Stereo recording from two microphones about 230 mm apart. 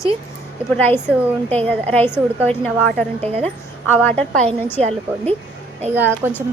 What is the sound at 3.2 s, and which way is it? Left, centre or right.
Speech, right.